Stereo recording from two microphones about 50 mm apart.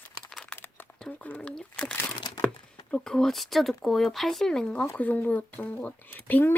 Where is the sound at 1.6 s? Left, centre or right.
Left.